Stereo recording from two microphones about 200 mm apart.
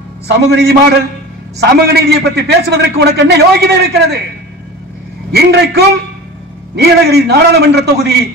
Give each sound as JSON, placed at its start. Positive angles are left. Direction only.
{"t": 0.5, "sound": "a man's voice", "side_deg": -55}
{"t": 5.3, "sound": "a man's voice", "side_deg": -55}